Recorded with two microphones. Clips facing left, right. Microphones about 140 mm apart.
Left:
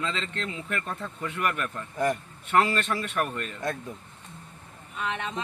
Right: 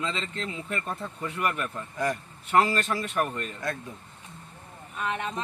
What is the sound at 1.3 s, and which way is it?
Speech, 30° right (ahead or behind).